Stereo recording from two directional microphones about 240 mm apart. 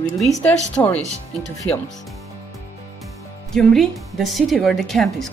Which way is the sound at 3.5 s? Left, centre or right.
Centre.